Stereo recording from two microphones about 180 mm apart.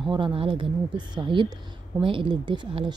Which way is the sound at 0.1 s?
30° right (ahead or behind).